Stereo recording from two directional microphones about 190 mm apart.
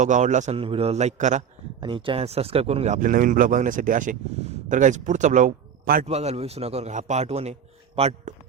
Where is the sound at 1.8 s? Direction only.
25° right (ahead or behind); by 6.1 s 50° right (ahead or behind).